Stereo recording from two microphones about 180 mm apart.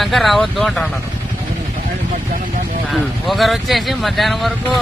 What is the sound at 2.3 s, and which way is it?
Vehicle, 45° right (ahead or behind).